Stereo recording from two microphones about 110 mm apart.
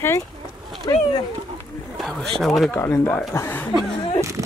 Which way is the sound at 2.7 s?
20° left (ahead or behind).